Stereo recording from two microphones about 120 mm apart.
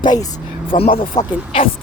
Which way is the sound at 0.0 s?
35° left (ahead or behind).